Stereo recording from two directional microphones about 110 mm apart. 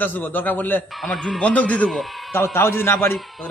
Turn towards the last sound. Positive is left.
turn(degrees=0)  # may be behind; listen again after turning